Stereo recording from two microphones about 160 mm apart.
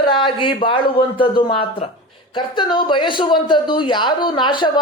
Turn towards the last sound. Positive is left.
turn(degrees=30)  # may be behind; listen again after turning